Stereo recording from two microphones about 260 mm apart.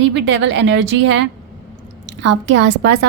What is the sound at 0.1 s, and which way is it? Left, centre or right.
Speech, right.